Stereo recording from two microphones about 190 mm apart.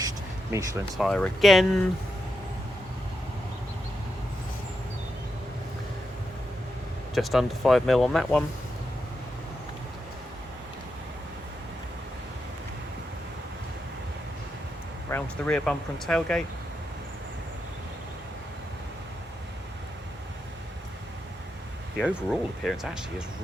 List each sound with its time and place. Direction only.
0.5 s speech: 15° right (ahead or behind)
0.9 s speech: 5° left (ahead or behind)
7.1 s speech: centre (ahead or behind)
15.1 s speech: 5° left (ahead or behind)
21.9 s speech: centre (ahead or behind)